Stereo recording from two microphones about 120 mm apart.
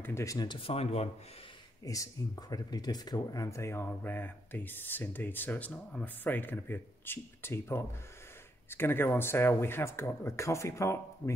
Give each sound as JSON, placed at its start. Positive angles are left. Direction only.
{"t": 0.0, "sound": "speech", "side_deg": 25}
{"t": 0.5, "sound": "speech", "side_deg": 50}
{"t": 1.9, "sound": "speech", "side_deg": 30}